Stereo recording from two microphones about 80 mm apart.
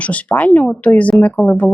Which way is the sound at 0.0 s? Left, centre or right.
Centre.